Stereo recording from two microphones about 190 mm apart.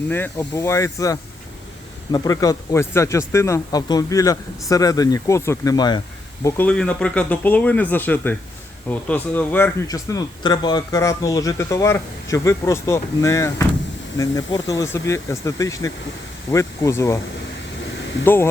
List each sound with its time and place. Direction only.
0.1 s speech: 10° left (ahead or behind)
6.4 s speech: 10° left (ahead or behind)
9.8 s speech: 20° left (ahead or behind)